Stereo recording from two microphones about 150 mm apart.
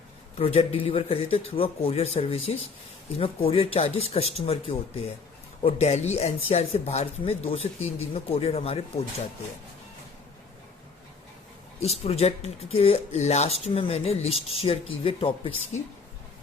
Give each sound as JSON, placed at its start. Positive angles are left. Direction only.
{"t": 0.3, "sound": "a man's voice", "side_deg": 40}
{"t": 11.8, "sound": "speech", "side_deg": 45}